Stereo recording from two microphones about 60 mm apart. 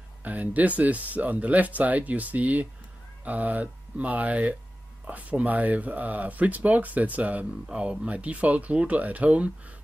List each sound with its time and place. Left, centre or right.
0.2 s speech: right
7.6 s speech: centre